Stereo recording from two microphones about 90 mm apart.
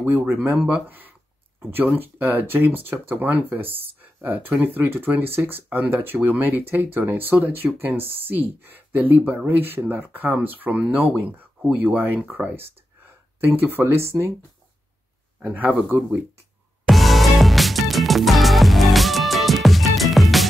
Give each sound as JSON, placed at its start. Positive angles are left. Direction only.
{"t": 0.0, "sound": "speech", "side_deg": -25}
{"t": 15.3, "sound": "speech", "side_deg": -15}
{"t": 16.8, "sound": "music", "side_deg": 0}